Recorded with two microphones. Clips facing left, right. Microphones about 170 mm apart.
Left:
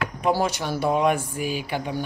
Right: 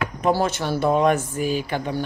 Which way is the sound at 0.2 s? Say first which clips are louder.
Right 2 dB; 10° left (ahead or behind).